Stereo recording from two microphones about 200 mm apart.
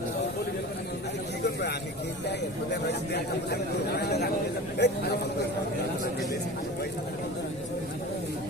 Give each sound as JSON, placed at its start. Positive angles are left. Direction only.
{"t": 2.8, "sound": "speech", "side_deg": 55}